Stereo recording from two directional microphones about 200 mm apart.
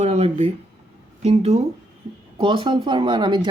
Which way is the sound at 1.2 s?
30° right (ahead or behind).